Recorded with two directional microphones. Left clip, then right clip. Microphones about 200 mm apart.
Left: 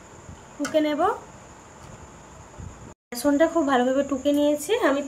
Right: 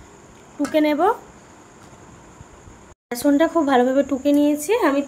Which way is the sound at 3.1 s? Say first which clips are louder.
Right 3 dB; 30° right (ahead or behind).